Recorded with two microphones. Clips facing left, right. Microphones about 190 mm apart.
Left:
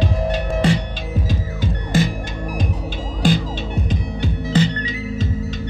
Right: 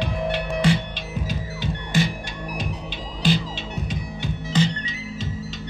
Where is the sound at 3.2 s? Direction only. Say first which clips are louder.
Left 4 dB; 50° left (ahead or behind).